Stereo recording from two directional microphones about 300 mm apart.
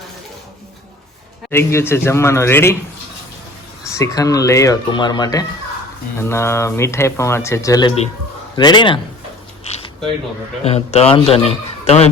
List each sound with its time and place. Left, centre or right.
1.5 s speech: centre
3.8 s speech: centre
9.7 s zipper: left
10.6 s a man's voice: centre